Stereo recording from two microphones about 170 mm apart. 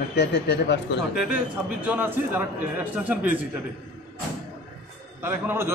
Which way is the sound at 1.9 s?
10° right (ahead or behind).